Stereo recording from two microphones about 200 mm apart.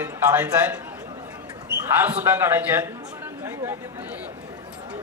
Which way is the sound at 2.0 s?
10° right (ahead or behind).